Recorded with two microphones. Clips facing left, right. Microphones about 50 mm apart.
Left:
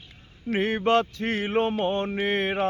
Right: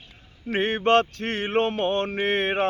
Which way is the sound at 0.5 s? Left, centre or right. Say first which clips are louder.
Right 2 dB; right.